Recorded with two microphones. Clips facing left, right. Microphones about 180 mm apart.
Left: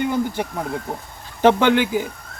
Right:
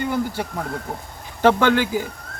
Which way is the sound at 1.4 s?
15° left (ahead or behind).